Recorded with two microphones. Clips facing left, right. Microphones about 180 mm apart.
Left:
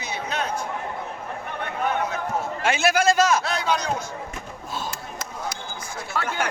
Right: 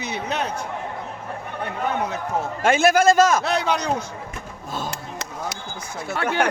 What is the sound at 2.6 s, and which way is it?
A man's voice, 50° right (ahead or behind).